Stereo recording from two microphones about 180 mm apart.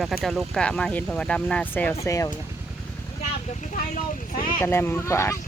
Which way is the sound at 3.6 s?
50° left (ahead or behind).